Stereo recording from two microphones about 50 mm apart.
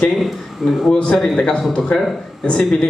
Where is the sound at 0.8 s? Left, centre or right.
Centre.